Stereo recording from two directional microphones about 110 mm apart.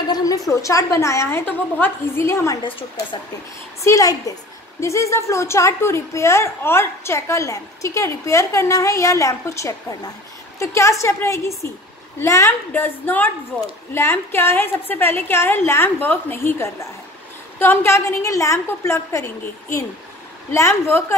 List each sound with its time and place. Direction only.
0.1 s a woman's voice: 30° left (ahead or behind)
3.8 s a woman's voice: 30° left (ahead or behind)